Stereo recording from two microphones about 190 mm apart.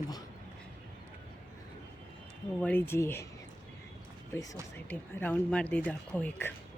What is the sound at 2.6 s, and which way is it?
Speech, 10° left (ahead or behind).